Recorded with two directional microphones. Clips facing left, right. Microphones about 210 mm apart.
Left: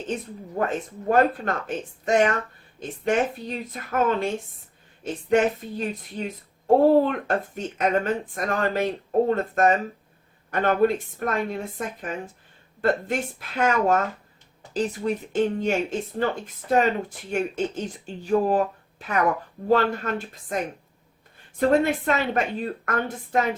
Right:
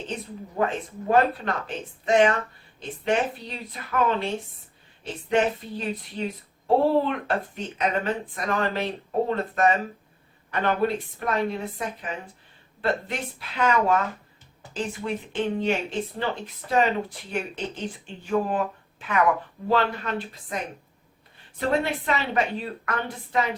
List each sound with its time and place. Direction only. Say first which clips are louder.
0.6 s speech: even; 45° left (ahead or behind)
21.7 s speech: left 3 dB; 45° left (ahead or behind)